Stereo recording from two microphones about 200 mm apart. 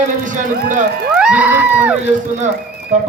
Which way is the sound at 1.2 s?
5° right (ahead or behind).